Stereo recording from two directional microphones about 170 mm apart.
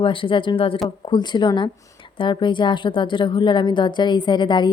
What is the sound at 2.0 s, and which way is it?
A woman's voice, 30° left (ahead or behind).